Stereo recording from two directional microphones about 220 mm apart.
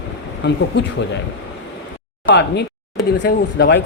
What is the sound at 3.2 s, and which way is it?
Speech, 50° left (ahead or behind).